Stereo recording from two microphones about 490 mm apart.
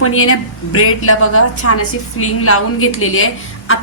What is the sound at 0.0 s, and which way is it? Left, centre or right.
A woman's voice, left.